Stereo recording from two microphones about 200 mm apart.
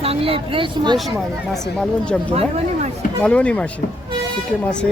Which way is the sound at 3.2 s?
5° left (ahead or behind).